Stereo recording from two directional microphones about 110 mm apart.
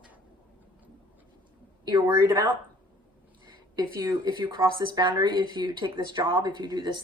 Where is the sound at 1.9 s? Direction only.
40° right (ahead or behind).